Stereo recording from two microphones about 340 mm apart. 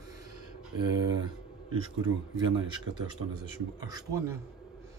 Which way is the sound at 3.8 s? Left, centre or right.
Centre.